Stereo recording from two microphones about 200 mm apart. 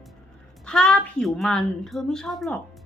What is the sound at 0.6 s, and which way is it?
A woman's voice, 5° left (ahead or behind).